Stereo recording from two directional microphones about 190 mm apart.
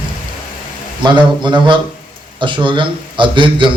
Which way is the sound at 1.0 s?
25° right (ahead or behind).